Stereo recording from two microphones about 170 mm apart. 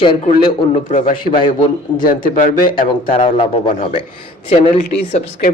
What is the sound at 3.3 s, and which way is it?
Speech, 30° left (ahead or behind).